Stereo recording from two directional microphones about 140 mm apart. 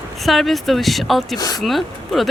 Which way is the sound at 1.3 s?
25° left (ahead or behind).